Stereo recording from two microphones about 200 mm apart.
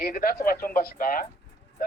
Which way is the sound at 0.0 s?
45° left (ahead or behind).